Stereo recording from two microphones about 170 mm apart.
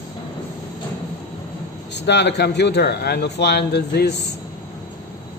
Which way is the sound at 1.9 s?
85° left.